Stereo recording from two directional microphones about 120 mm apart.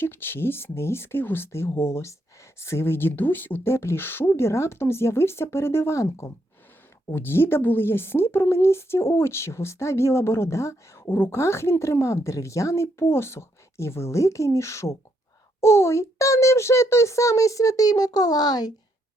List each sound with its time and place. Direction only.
0.0 s speech: 20° left (ahead or behind); by 18.7 s 35° left (ahead or behind)